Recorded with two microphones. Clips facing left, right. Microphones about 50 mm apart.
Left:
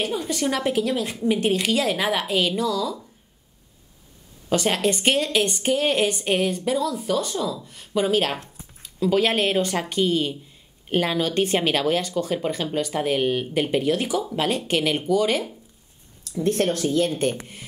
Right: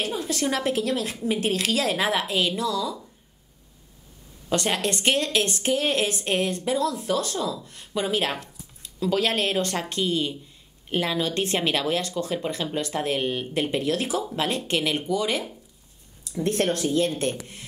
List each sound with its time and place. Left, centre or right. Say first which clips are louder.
0.2 s a woman's voice: left 1 dB; centre
4.5 s a woman's voice: left 3 dB; centre
14.0 s speech: left 2 dB; centre
14.3 s speech: left 3 dB; centre
17.1 s speech: left 3 dB; centre